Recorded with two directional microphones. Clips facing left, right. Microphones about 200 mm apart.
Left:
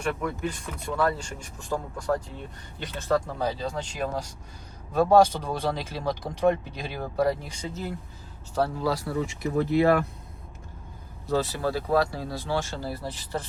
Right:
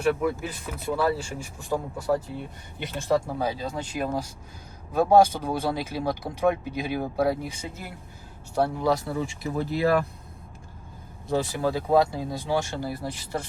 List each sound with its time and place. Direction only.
0.0 s speech: 5° right (ahead or behind)
11.3 s speech: 15° right (ahead or behind)